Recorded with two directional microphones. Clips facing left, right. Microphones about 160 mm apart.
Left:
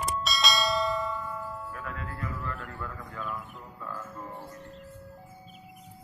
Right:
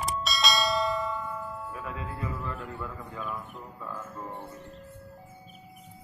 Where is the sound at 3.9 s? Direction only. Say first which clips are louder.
Right 1 dB; 20° right (ahead or behind).